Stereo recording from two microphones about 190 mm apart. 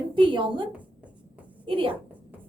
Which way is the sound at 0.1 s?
25° right (ahead or behind).